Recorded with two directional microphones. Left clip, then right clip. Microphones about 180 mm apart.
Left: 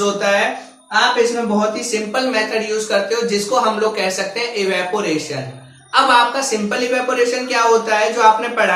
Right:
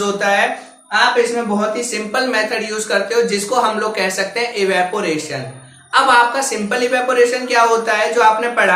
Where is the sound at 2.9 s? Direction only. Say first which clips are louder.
Right 1 dB; 20° right (ahead or behind).